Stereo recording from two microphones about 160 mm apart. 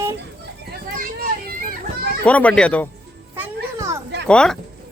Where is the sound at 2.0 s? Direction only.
85° right.